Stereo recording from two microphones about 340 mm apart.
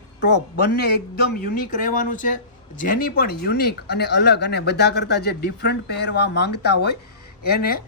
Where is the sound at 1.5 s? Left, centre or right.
Left.